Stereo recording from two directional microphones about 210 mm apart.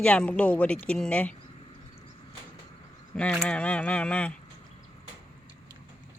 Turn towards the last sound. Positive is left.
turn(degrees=5)  # may be behind; listen again after turning